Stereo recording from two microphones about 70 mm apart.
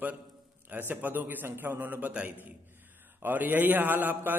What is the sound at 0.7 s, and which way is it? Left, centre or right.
A man's voice, right.